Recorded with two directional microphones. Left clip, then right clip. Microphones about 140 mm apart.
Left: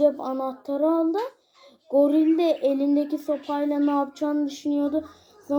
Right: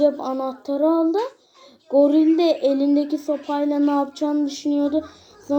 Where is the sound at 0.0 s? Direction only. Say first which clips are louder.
Right 2 dB; 5° left (ahead or behind).